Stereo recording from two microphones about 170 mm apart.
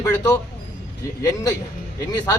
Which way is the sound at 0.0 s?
20° left (ahead or behind).